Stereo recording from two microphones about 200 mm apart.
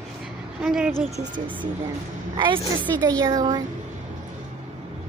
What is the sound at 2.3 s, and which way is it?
A woman's voice, 25° right (ahead or behind).